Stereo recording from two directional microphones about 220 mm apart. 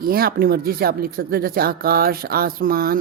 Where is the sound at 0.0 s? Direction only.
45° right (ahead or behind).